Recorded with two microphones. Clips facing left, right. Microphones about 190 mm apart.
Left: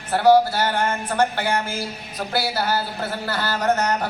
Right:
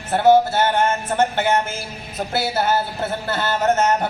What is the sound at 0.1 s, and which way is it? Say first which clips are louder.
Speech: right 1 dB; 25° right (ahead or behind).